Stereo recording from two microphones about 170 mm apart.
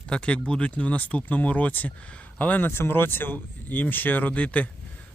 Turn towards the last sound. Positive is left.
turn(degrees=10)  # may be behind; listen again after turning